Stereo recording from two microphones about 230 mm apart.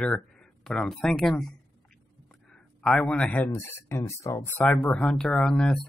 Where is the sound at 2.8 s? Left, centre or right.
Centre.